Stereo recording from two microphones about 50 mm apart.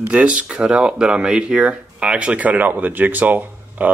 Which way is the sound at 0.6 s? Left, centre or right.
Centre.